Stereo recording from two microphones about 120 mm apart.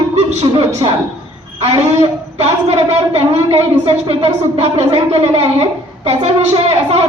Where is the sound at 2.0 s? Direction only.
60° right (ahead or behind).